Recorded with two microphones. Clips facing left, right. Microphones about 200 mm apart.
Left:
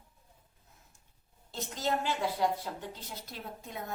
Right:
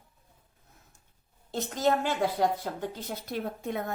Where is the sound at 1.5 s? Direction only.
50° right (ahead or behind).